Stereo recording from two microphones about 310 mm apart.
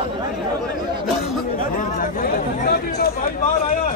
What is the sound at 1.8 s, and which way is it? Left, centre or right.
Chatter, left.